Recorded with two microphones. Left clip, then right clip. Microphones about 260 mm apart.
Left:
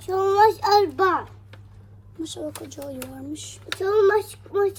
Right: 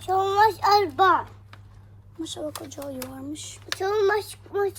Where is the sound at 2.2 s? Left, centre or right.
Centre.